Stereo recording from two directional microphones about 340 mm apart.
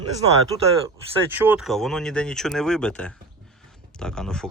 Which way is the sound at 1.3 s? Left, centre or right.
Centre.